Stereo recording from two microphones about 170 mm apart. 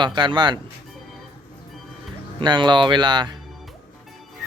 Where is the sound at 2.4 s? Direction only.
25° right (ahead or behind).